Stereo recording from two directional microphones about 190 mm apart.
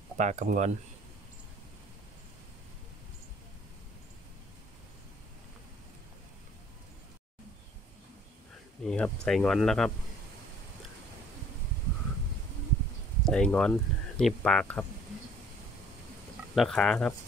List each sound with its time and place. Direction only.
0.2 s speech: 40° right (ahead or behind)
8.8 s speech: 5° left (ahead or behind)
13.2 s speech: 5° left (ahead or behind)
16.5 s speech: 5° left (ahead or behind)